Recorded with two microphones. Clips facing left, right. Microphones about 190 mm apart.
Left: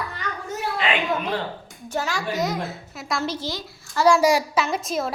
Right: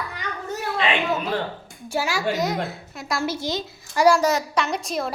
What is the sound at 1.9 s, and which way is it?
A woman's voice, 10° right (ahead or behind).